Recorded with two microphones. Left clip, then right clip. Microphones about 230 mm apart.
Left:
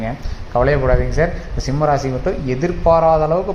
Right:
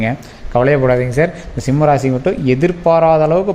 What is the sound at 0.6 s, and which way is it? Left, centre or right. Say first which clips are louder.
Speech: right 3 dB; right.